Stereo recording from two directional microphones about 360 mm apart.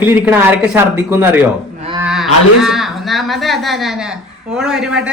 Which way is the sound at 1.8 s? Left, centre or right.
Centre.